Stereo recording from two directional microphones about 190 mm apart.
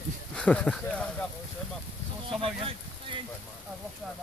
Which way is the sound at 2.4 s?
30° right (ahead or behind).